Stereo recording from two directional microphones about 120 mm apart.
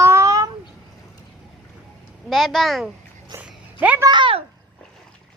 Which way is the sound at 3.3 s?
25° right (ahead or behind).